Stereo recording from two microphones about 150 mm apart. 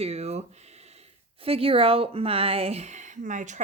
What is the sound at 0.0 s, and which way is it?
Speech, 45° right (ahead or behind).